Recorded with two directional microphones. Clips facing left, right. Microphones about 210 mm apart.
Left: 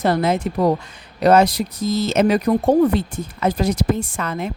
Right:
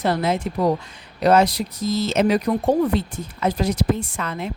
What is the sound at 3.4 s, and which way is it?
Speech, 45° left (ahead or behind).